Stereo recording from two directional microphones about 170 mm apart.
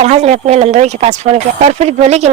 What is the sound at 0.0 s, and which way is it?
Speech, 40° right (ahead or behind).